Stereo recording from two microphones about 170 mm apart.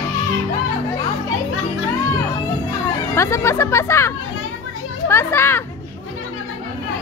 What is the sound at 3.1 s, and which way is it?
A child's voice, 15° left (ahead or behind).